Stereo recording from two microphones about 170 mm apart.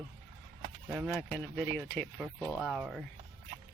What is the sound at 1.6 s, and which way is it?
Speech, 10° left (ahead or behind).